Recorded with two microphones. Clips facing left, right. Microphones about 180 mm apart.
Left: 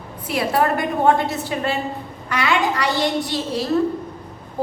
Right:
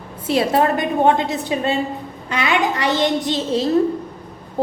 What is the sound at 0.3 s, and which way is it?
A woman's voice, 25° right (ahead or behind).